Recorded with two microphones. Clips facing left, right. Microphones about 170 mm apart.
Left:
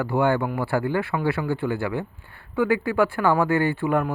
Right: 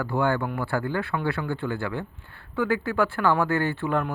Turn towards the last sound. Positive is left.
turn(degrees=15)  # may be behind; listen again after turning